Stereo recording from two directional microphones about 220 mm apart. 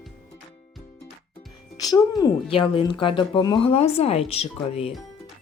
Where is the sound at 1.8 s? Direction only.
15° left (ahead or behind).